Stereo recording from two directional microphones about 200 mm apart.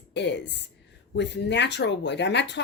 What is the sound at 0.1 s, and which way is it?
A woman's voice, 60° left (ahead or behind).